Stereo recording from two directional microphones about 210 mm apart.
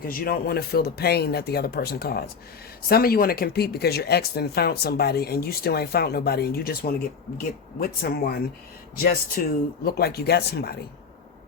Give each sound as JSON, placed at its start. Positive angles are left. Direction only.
{"t": 0.0, "sound": "speech", "side_deg": 45}